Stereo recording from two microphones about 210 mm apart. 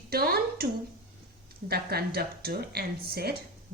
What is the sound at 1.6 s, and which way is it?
Speech, 50° right (ahead or behind).